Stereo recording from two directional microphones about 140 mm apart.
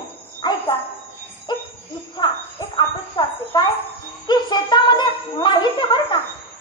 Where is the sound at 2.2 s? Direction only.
35° left (ahead or behind).